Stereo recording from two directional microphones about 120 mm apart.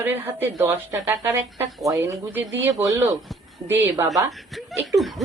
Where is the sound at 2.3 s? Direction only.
15° right (ahead or behind).